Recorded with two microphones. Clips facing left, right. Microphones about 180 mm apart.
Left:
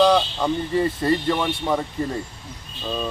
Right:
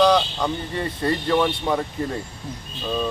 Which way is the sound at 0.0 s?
5° left (ahead or behind).